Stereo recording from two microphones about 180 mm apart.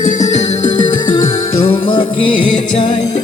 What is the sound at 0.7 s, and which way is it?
Music, 25° left (ahead or behind).